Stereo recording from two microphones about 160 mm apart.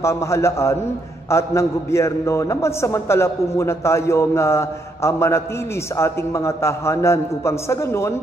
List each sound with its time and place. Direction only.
0.0 s a man's voice: 15° left (ahead or behind)